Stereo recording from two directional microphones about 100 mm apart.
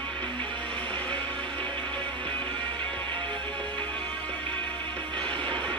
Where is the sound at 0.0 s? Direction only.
10° left (ahead or behind).